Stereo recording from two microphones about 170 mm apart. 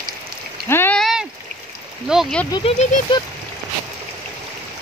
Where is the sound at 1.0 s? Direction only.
Centre (ahead or behind).